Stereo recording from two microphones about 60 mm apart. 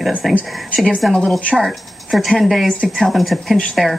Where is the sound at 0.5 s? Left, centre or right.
Centre.